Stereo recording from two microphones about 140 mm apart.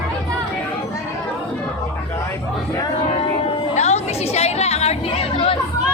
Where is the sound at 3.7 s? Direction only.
50° left (ahead or behind).